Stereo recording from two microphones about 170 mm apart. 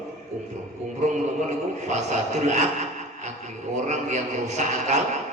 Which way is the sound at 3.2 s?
45° right (ahead or behind).